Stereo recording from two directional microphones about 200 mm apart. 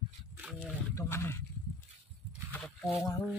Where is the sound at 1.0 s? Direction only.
10° left (ahead or behind).